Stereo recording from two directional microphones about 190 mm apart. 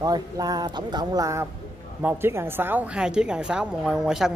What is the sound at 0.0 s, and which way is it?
Speech, 20° right (ahead or behind).